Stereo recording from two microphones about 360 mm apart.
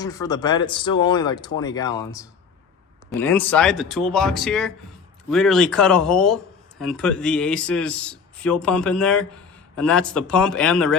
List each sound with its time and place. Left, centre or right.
0.0 s speech: centre